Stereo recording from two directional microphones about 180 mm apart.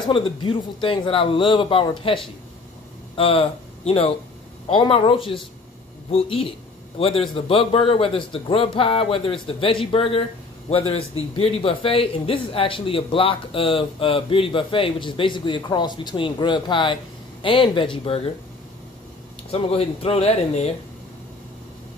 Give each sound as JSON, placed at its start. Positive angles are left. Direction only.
{"t": 0.1, "sound": "a man's voice", "side_deg": 30}
{"t": 19.5, "sound": "a man's voice", "side_deg": 35}